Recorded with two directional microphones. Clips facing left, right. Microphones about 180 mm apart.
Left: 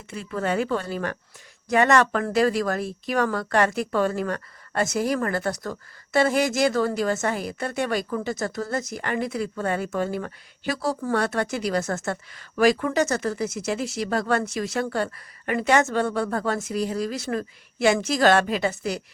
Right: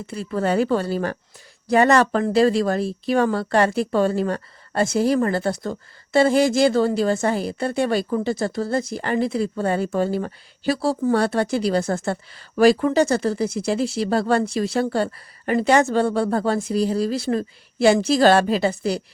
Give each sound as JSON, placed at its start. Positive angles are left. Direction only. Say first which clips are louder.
{"t": 0.1, "sound": "speech", "louder": "right 4 dB", "side_deg": -35}